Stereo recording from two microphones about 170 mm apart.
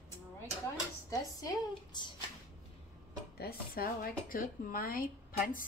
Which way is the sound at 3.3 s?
65° left (ahead or behind).